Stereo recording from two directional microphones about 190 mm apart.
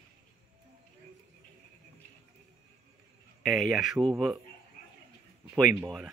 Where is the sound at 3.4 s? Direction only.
Centre (ahead or behind).